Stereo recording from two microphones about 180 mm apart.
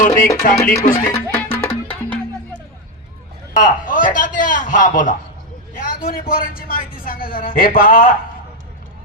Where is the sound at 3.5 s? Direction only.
50° left (ahead or behind).